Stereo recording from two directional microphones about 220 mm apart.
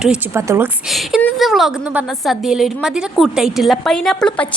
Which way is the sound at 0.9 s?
Centre (ahead or behind).